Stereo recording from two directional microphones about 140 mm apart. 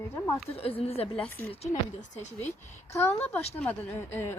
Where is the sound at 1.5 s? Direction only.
50° left (ahead or behind).